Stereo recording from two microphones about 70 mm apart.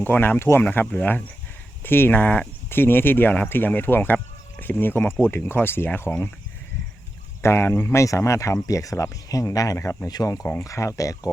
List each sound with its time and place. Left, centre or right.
0.0 s speech: left
7.4 s speech: left
9.7 s speech: left